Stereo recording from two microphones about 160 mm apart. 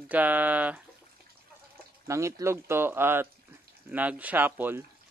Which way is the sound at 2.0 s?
20° right (ahead or behind).